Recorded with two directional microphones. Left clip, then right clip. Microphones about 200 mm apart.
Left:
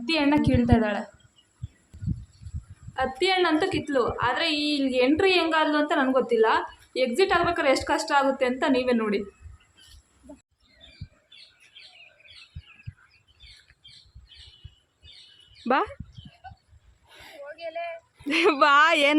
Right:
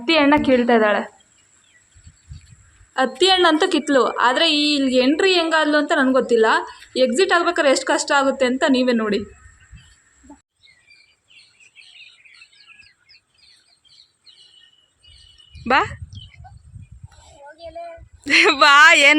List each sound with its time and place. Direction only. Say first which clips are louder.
0.0 s a woman's voice: right 8 dB; 15° right (ahead or behind)
2.9 s a woman's voice: right 8 dB; 35° right (ahead or behind)
15.6 s speech: right 7 dB; centre (ahead or behind)
18.3 s speech: right 7 dB; centre (ahead or behind)